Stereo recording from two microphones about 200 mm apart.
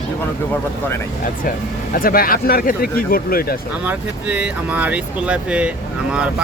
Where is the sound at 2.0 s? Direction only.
45° left (ahead or behind).